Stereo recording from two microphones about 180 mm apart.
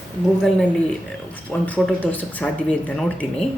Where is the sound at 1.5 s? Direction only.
10° left (ahead or behind).